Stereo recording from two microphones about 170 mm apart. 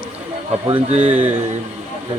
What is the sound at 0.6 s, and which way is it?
Speech, 30° right (ahead or behind).